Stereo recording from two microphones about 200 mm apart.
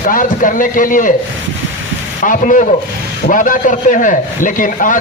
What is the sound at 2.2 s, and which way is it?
A man's voice, 40° left (ahead or behind).